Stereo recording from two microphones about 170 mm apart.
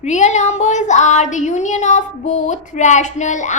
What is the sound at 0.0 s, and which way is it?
A woman's voice, 45° left (ahead or behind).